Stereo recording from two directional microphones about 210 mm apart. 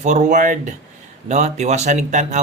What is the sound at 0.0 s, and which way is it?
Speech, 35° right (ahead or behind).